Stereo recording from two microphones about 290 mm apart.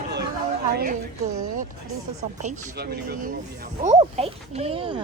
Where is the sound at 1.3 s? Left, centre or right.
Right.